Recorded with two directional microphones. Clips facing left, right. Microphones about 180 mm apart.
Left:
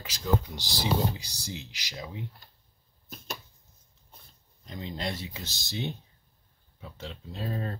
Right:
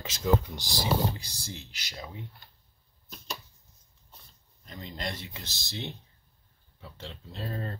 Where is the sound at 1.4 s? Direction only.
15° left (ahead or behind).